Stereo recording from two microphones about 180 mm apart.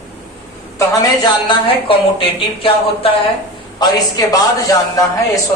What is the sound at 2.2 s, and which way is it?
A man's voice, 30° left (ahead or behind).